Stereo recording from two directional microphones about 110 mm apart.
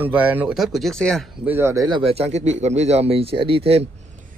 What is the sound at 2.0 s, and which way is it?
Speech, 65° right (ahead or behind).